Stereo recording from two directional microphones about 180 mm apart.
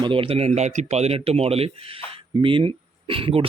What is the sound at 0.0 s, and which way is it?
Speech, 30° right (ahead or behind).